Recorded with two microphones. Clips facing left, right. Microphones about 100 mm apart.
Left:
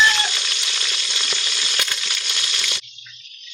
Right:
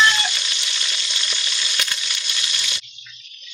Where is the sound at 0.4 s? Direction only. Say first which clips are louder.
Left 1 dB; 65° left (ahead or behind).